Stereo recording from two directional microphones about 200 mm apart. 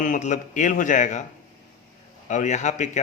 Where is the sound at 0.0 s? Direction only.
40° left (ahead or behind).